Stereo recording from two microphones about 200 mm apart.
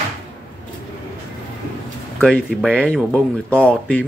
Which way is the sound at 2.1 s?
5° left (ahead or behind).